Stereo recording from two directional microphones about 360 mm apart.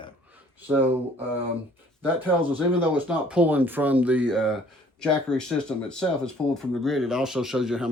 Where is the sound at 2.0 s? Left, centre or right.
Centre.